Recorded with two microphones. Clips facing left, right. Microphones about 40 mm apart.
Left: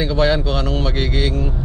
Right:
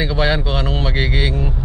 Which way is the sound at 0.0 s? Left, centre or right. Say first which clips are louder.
Left 1 dB; centre.